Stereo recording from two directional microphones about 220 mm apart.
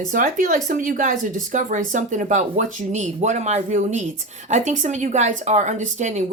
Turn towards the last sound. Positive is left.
turn(degrees=-35)  # may be behind; listen again after turning